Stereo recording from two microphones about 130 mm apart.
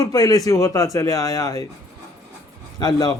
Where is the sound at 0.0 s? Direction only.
25° left (ahead or behind).